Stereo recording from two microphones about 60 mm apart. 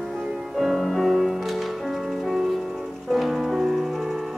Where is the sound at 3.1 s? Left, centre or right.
Centre.